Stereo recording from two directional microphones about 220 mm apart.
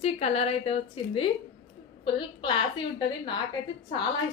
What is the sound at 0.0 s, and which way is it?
A woman's voice, 30° left (ahead or behind).